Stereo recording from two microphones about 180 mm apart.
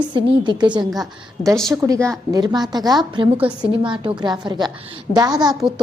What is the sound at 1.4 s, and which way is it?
Speech, 45° left (ahead or behind).